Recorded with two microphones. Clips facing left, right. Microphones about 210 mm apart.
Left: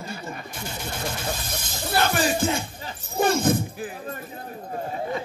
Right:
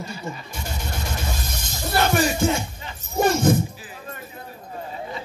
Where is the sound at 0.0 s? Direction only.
55° left (ahead or behind).